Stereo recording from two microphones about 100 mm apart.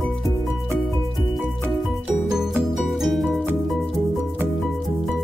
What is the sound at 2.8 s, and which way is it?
Music, centre (ahead or behind).